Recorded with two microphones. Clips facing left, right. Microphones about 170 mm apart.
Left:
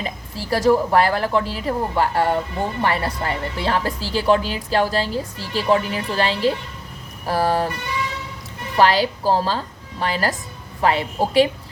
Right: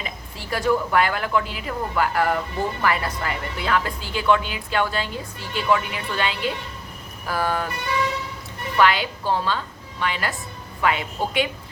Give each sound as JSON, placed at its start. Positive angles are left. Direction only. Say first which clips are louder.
{"t": 0.0, "sound": "a woman's voice", "louder": "left 5 dB", "side_deg": 35}
{"t": 8.7, "sound": "a woman's voice", "louder": "left 3 dB", "side_deg": 35}